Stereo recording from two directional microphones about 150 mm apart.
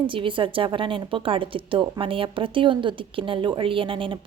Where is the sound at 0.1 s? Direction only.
35° right (ahead or behind).